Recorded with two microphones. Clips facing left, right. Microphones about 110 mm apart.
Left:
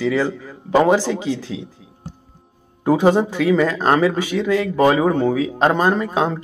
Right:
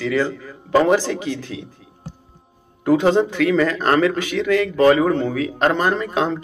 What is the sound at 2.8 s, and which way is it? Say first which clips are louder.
A man's voice: even; 15° left (ahead or behind).